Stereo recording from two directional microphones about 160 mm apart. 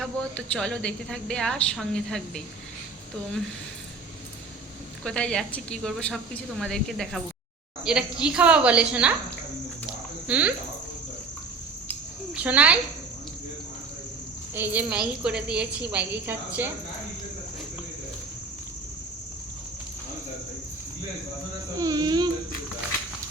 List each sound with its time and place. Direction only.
0.0 s a woman's voice: 5° left (ahead or behind)
5.0 s a woman's voice: 5° left (ahead or behind)
10.2 s a woman's voice: 10° right (ahead or behind)
12.3 s a woman's voice: 10° right (ahead or behind)
14.5 s a woman's voice: 10° right (ahead or behind)
21.8 s speech: 20° right (ahead or behind)